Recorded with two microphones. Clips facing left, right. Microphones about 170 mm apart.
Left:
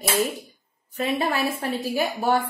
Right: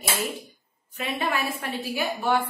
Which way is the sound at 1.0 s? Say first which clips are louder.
Left 4 dB; 35° left (ahead or behind).